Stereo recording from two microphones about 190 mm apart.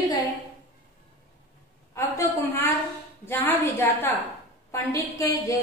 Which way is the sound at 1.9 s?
15° left (ahead or behind).